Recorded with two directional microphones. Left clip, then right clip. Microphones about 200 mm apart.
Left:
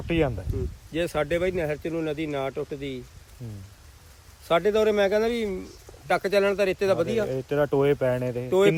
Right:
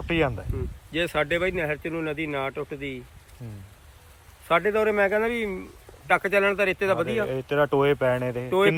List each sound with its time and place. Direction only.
0.1 s speech: 10° left (ahead or behind)
4.5 s speech: 15° left (ahead or behind)